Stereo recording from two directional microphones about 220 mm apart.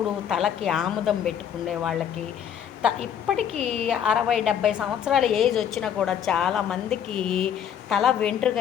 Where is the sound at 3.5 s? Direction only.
30° right (ahead or behind).